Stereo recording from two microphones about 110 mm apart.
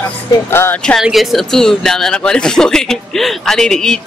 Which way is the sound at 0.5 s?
20° left (ahead or behind).